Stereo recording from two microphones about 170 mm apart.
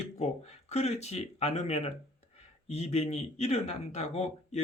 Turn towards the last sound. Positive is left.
turn(degrees=40)  # may be behind; listen again after turning